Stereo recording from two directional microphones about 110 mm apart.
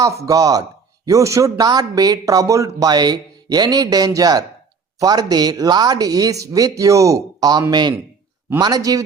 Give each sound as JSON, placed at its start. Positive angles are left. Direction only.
{"t": 0.3, "sound": "speech", "side_deg": -35}